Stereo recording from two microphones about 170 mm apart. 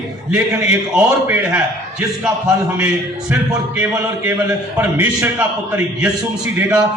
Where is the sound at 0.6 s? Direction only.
10° right (ahead or behind).